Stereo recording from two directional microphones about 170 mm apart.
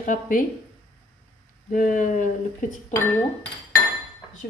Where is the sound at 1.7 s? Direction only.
50° left (ahead or behind).